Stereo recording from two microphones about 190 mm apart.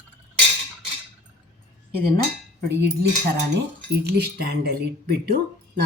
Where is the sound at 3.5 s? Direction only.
60° right (ahead or behind).